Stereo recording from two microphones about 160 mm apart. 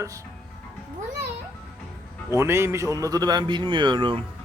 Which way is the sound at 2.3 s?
15° right (ahead or behind).